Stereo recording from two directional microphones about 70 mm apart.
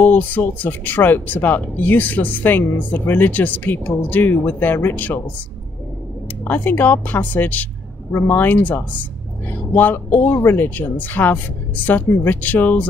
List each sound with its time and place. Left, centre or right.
0.0 s speech: left
6.4 s speech: left